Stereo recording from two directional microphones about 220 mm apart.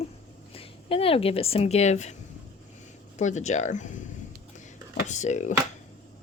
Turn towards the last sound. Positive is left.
turn(degrees=30)  # may be behind; listen again after turning